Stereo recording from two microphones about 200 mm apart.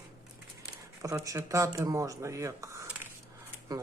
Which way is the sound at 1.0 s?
15° right (ahead or behind).